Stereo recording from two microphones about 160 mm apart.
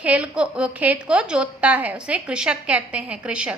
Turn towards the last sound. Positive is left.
turn(degrees=-5)  # may be behind; listen again after turning